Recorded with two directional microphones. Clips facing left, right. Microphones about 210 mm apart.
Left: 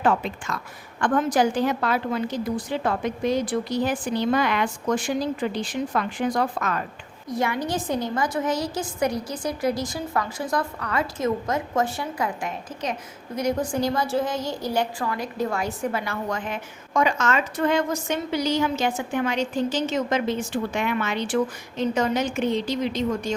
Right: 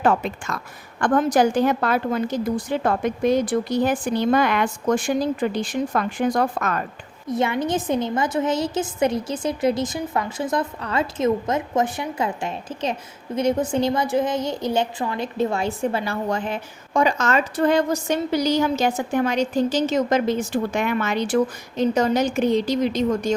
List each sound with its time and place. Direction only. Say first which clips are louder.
0.0 s a woman's voice: right 2 dB; 45° right (ahead or behind)
7.3 s a woman's voice: right 4 dB; 25° right (ahead or behind); by 23.3 s 40° right (ahead or behind)